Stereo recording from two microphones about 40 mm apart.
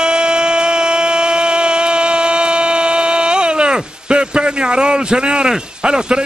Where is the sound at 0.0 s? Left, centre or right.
Right.